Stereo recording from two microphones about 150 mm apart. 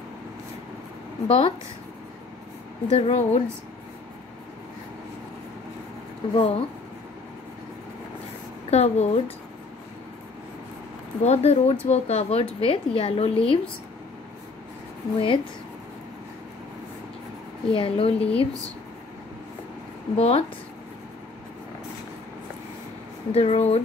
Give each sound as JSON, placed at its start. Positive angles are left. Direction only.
{"t": 1.2, "sound": "speech", "side_deg": 45}
{"t": 2.9, "sound": "speech", "side_deg": 45}
{"t": 6.3, "sound": "a woman's voice", "side_deg": 40}
{"t": 8.6, "sound": "speech", "side_deg": 45}
{"t": 11.2, "sound": "a woman's voice", "side_deg": 45}
{"t": 15.1, "sound": "a woman's voice", "side_deg": 35}
{"t": 17.6, "sound": "a woman's voice", "side_deg": 40}
{"t": 20.2, "sound": "speech", "side_deg": 45}
{"t": 23.3, "sound": "speech", "side_deg": 45}